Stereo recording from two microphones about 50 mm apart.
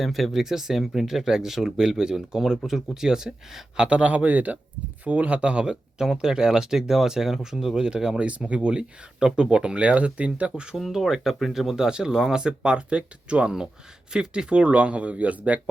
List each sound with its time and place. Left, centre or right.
0.0 s speech: centre; by 10.5 s right
10.5 s speech: centre
10.9 s speech: centre; by 15.7 s right